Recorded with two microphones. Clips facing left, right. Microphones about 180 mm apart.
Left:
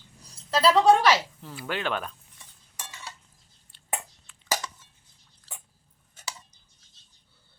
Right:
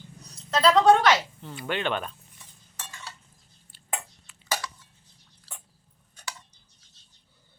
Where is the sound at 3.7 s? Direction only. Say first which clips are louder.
Left 1 dB; 5° right (ahead or behind).